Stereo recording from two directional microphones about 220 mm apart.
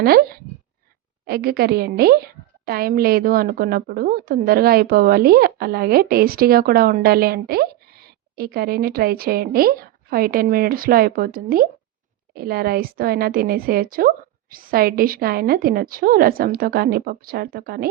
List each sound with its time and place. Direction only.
0.0 s a woman's voice: 45° right (ahead or behind)